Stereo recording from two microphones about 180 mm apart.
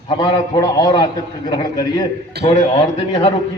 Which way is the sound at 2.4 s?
65° right (ahead or behind).